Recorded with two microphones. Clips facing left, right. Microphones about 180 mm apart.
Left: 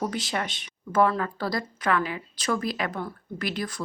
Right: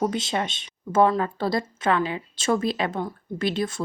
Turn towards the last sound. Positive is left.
turn(degrees=-25)  # may be behind; listen again after turning